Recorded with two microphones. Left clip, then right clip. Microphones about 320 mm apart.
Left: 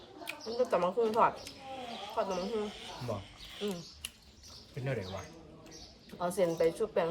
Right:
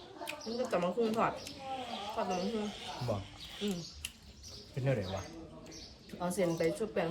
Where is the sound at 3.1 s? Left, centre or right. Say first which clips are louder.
Right 1 dB; centre.